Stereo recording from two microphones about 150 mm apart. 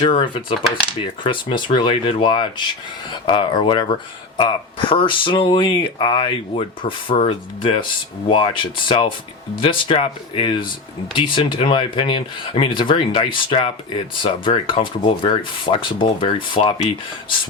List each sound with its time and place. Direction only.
0.0 s speech: 35° left (ahead or behind)